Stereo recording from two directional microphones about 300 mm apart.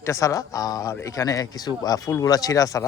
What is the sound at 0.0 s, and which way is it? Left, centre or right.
Speech, centre.